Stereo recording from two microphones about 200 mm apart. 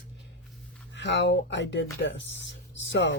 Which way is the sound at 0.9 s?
65° left (ahead or behind).